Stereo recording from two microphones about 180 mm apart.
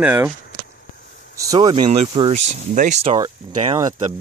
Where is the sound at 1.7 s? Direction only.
30° right (ahead or behind).